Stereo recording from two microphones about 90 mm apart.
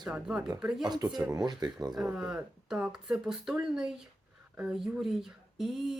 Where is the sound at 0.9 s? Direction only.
45° right (ahead or behind).